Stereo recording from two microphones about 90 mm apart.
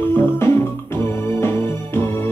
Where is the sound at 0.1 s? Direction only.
25° left (ahead or behind).